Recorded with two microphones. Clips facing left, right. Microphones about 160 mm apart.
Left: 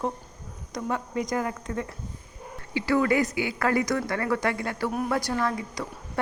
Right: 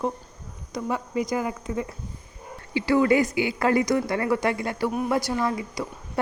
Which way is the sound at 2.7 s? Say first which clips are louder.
Right 3 dB; 25° right (ahead or behind).